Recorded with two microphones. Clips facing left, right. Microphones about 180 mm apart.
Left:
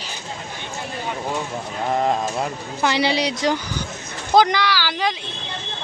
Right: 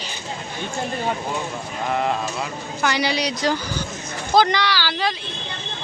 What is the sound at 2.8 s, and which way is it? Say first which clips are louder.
Speech: left 2 dB; 25° left (ahead or behind).